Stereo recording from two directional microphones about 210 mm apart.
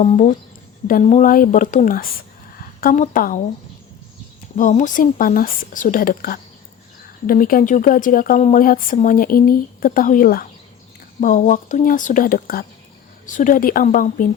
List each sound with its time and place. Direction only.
0.0 s speech: 35° left (ahead or behind)
4.5 s speech: 35° left (ahead or behind)